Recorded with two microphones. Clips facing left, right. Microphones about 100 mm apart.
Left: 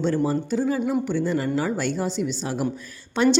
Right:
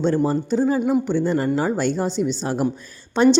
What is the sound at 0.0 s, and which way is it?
A woman's voice, 30° right (ahead or behind).